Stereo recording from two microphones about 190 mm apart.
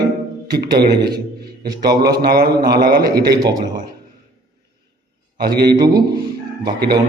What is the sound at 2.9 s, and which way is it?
Speech, 55° right (ahead or behind).